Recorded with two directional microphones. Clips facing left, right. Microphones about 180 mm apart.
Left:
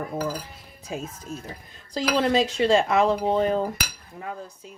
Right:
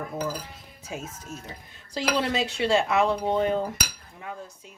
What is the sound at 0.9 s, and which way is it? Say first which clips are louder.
Speech: left 4 dB; 35° left (ahead or behind).